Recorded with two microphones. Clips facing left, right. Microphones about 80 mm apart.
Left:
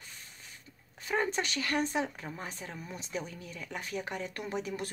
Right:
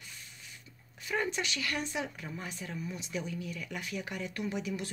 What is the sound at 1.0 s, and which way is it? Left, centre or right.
Speech, left.